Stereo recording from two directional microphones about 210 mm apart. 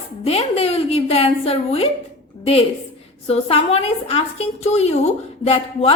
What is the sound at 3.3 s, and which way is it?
A woman's voice, 30° left (ahead or behind).